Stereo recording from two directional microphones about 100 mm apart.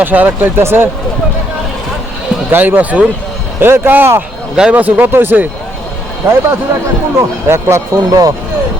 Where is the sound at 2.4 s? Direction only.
20° right (ahead or behind).